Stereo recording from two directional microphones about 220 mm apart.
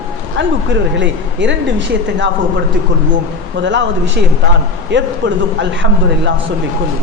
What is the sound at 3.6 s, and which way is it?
Speech, 55° right (ahead or behind).